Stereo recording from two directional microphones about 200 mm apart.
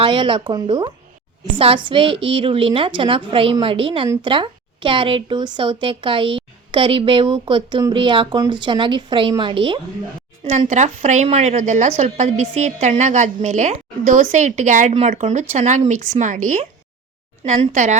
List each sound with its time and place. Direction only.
0.0 s a woman's voice: 25° right (ahead or behind)
17.4 s a woman's voice: 35° right (ahead or behind)